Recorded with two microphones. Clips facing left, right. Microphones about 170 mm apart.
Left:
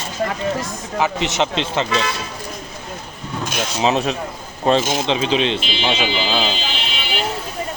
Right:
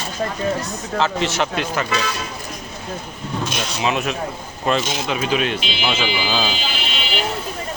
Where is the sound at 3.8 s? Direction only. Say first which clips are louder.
Left 3 dB; 30° left (ahead or behind).